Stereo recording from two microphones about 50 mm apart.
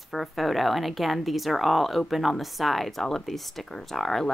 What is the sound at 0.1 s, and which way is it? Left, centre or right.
A woman's voice, centre.